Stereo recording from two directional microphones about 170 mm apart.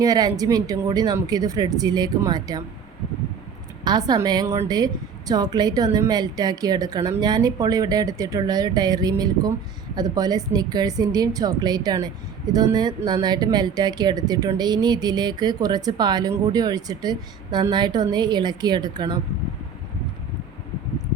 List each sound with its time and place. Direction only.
0.0 s speech: 20° right (ahead or behind)
3.8 s speech: 25° right (ahead or behind)